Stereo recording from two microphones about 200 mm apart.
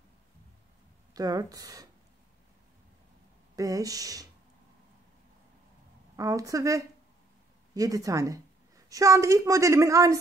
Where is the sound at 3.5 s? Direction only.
15° right (ahead or behind).